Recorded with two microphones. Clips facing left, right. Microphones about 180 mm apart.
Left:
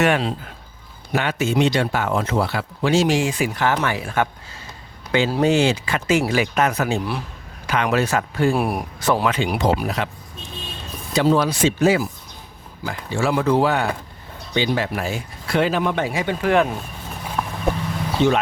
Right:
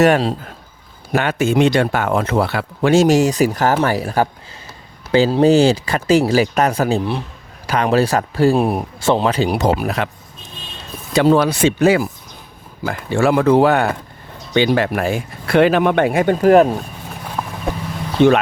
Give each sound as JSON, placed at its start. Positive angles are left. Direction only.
{"t": 0.0, "sound": "speech", "side_deg": -40}
{"t": 1.1, "sound": "speech", "side_deg": -50}
{"t": 8.5, "sound": "speech", "side_deg": -25}
{"t": 11.1, "sound": "speech", "side_deg": -60}
{"t": 17.4, "sound": "vehicle", "side_deg": -20}
{"t": 18.2, "sound": "speech", "side_deg": -60}